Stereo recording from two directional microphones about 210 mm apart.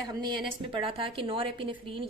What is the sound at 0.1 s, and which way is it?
A woman's voice, 20° right (ahead or behind).